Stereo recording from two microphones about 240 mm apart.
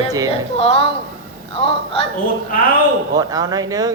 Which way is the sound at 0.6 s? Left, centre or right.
Left.